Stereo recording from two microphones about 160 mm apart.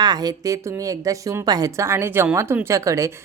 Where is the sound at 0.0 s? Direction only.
25° right (ahead or behind).